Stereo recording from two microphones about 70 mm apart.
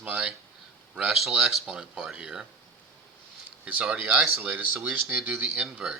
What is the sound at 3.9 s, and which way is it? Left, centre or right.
Speech, right.